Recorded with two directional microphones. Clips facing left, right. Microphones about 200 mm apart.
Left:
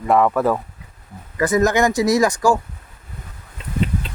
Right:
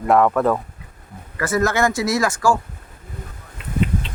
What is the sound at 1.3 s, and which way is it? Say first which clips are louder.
Speech: left 3 dB; 20° left (ahead or behind).